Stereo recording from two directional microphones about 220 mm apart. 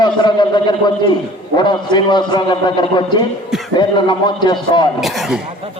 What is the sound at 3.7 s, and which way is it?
A man's voice, 20° left (ahead or behind).